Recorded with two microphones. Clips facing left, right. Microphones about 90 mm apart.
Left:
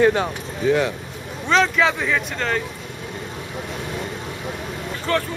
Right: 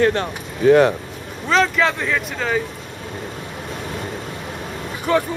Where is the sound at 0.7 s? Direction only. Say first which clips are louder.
Right 7 dB; 50° right (ahead or behind).